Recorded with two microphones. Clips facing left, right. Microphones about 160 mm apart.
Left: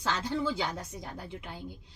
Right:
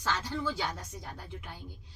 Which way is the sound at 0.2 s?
25° left (ahead or behind).